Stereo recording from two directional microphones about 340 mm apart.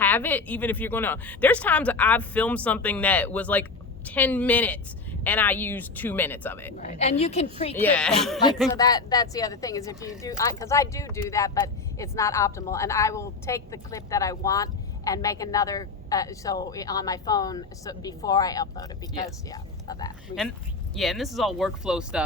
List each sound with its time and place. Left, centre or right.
0.0 s speech: centre
6.8 s a woman's voice: centre
7.8 s speech: centre
8.7 s speech: centre
20.9 s speech: centre